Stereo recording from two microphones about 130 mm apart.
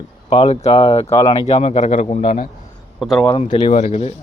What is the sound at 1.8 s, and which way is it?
Speech, 65° left (ahead or behind).